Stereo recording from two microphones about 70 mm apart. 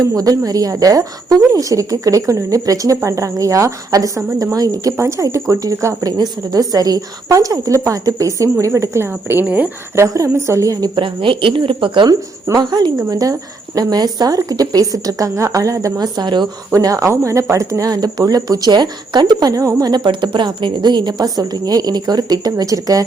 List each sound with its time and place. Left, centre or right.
0.0 s a woman's voice: right
4.9 s a woman's voice: right
6.1 s a woman's voice: right
10.3 s a woman's voice: right
12.5 s a woman's voice: right
16.0 s speech: right
16.7 s a woman's voice: right
19.9 s a woman's voice: right